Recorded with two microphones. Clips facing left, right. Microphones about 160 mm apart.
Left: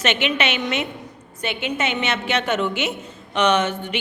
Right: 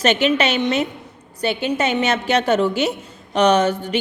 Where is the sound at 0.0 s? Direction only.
40° right (ahead or behind).